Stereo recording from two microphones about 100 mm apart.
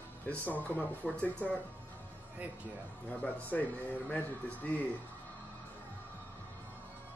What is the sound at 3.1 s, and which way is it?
Speech, 15° left (ahead or behind).